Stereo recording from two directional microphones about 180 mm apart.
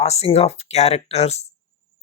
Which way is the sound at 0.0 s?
35° left (ahead or behind).